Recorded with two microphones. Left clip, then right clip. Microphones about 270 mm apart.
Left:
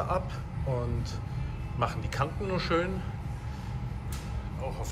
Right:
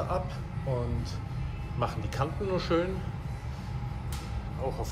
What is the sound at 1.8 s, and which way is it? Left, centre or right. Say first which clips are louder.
A man's voice: left 1 dB; centre.